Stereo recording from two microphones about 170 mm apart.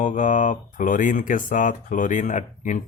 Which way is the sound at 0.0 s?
45° left (ahead or behind).